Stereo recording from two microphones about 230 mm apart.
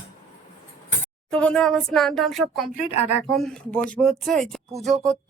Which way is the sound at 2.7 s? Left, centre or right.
Left.